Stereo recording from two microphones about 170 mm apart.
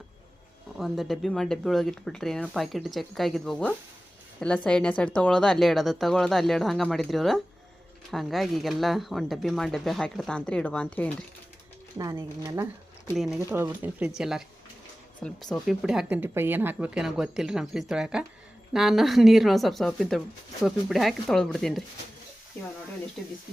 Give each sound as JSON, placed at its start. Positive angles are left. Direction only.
{"t": 0.8, "sound": "speech", "side_deg": 0}
{"t": 11.9, "sound": "speech", "side_deg": -20}
{"t": 13.1, "sound": "speech", "side_deg": 0}
{"t": 23.2, "sound": "speech", "side_deg": 0}